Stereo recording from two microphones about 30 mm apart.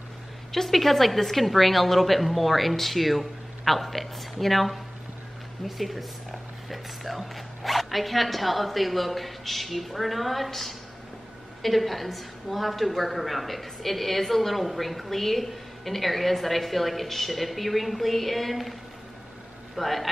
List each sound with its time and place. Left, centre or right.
0.5 s a woman's voice: centre
19.8 s a woman's voice: centre